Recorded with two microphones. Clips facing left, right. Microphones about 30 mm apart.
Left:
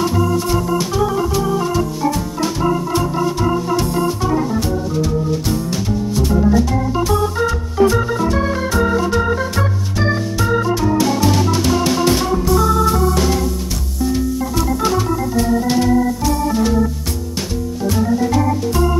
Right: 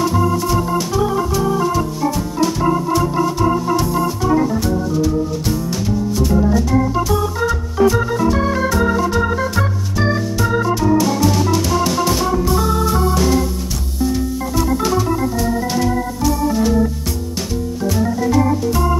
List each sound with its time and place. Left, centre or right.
0.1 s organ: centre
6.1 s organ: centre
11.0 s music: centre
12.4 s organ: centre
13.1 s music: centre
15.3 s organ: centre
18.3 s organ: centre